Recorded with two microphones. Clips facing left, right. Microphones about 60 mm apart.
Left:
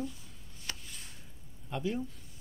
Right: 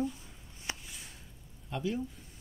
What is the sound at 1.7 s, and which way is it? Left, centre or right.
Speech, centre.